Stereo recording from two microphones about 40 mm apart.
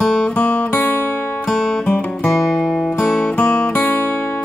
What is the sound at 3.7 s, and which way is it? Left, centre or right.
Music, left.